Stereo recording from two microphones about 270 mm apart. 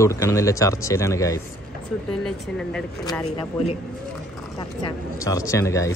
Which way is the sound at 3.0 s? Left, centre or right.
Centre.